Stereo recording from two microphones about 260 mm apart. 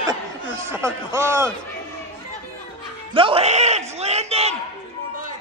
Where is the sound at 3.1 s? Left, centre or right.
Centre.